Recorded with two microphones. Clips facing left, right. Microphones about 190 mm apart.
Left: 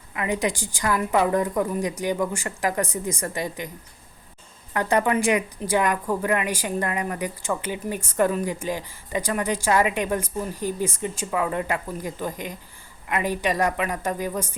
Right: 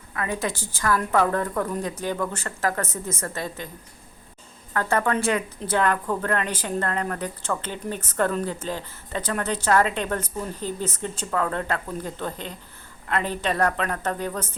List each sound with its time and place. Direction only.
0.1 s a woman's voice: 15° left (ahead or behind)
4.7 s a woman's voice: 15° left (ahead or behind)